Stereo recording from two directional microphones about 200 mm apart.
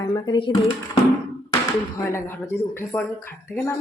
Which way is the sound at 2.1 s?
10° left (ahead or behind).